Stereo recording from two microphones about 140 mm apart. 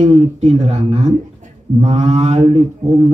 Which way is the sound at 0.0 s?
50° right (ahead or behind).